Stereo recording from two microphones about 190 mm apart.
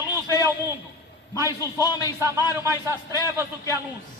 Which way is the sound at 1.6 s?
20° left (ahead or behind).